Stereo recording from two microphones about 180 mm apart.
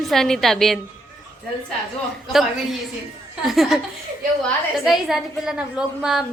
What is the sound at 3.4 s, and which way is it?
Speech, centre (ahead or behind).